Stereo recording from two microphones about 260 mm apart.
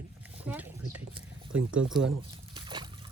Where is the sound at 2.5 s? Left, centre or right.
Centre.